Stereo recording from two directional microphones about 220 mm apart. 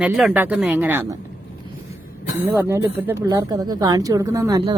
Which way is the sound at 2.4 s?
10° right (ahead or behind).